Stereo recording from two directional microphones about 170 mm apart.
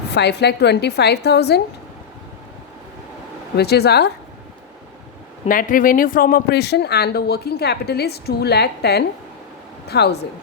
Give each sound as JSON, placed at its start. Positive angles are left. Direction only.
{"t": 0.1, "sound": "speech", "side_deg": 80}
{"t": 3.6, "sound": "speech", "side_deg": 70}
{"t": 5.5, "sound": "speech", "side_deg": 55}